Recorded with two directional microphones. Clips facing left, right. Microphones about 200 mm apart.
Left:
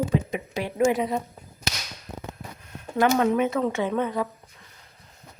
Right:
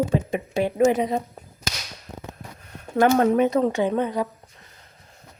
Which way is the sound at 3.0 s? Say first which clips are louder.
Right 3 dB; 45° right (ahead or behind).